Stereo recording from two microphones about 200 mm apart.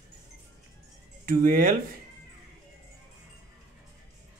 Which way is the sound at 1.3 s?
45° right (ahead or behind).